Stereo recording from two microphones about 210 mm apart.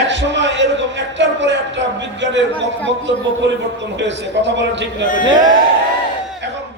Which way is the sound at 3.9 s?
60° right (ahead or behind).